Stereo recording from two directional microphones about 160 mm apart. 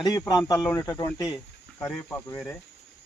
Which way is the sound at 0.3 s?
25° left (ahead or behind).